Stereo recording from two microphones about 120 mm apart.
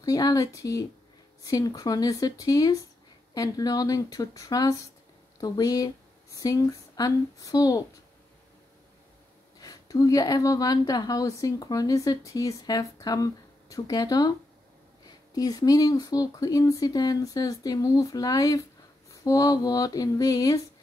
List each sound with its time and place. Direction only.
0.0 s speech: 30° left (ahead or behind)
9.6 s speech: 30° left (ahead or behind)